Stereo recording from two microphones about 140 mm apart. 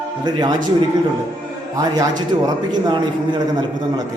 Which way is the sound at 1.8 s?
30° right (ahead or behind).